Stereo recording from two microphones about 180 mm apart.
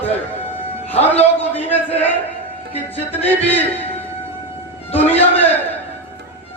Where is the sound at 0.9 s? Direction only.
10° left (ahead or behind).